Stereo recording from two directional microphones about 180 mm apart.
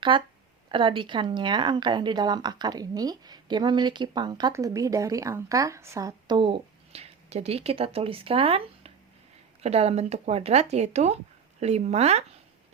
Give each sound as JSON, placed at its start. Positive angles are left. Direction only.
{"t": 0.1, "sound": "speech", "side_deg": -25}